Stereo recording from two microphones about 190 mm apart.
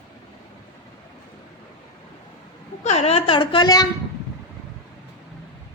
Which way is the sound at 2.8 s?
35° left (ahead or behind).